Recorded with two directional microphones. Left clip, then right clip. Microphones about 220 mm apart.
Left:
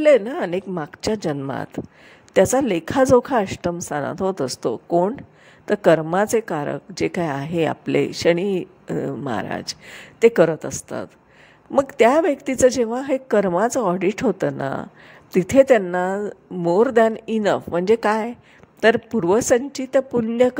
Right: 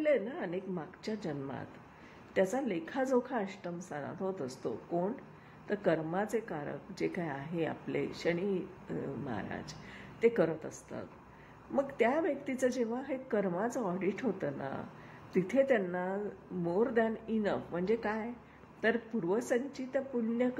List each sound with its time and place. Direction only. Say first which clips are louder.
0.0 s a woman's voice: left 16 dB; 45° left (ahead or behind)